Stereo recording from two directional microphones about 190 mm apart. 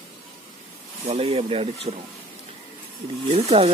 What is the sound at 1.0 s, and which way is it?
Speech, 30° right (ahead or behind).